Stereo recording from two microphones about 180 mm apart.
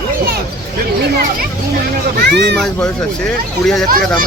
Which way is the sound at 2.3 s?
70° right (ahead or behind).